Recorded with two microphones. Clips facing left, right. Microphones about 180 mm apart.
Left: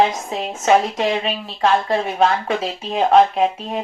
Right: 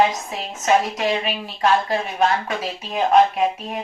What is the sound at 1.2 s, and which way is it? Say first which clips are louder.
Speech: left 1 dB; 25° left (ahead or behind).